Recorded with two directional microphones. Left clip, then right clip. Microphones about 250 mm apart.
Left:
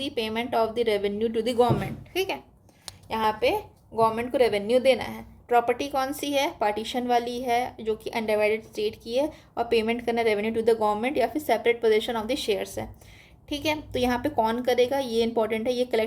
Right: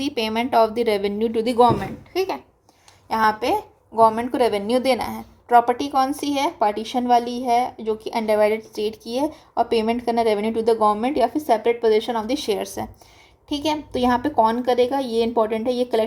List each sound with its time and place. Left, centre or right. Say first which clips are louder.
0.1 s a woman's voice: right 8 dB; centre
3.1 s a woman's voice: right 5 dB; right